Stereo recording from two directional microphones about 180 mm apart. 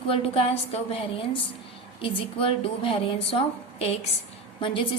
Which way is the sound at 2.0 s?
30° left (ahead or behind).